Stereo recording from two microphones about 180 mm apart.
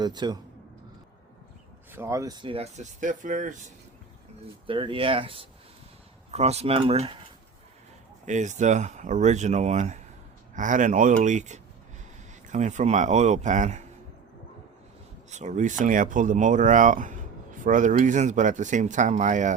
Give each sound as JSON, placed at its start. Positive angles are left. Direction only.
{"t": 0.0, "sound": "speech", "side_deg": -25}
{"t": 1.9, "sound": "speech", "side_deg": -15}
{"t": 4.6, "sound": "speech", "side_deg": -30}
{"t": 8.3, "sound": "speech", "side_deg": -40}
{"t": 15.3, "sound": "speech", "side_deg": -40}